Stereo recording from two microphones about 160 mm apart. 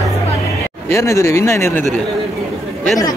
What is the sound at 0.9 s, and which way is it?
Speech, 20° left (ahead or behind).